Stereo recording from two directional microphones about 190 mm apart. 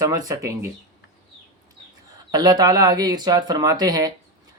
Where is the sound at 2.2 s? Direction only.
20° right (ahead or behind).